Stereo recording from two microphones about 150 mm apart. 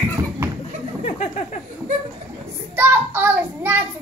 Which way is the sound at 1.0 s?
45° left (ahead or behind).